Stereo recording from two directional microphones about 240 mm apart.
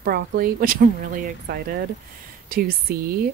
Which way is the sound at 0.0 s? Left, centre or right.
Right.